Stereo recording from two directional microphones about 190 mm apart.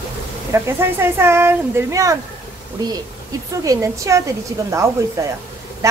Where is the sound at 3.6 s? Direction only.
15° right (ahead or behind).